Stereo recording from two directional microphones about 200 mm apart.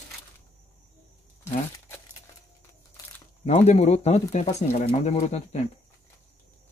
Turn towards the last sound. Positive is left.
turn(degrees=35)  # may be behind; listen again after turning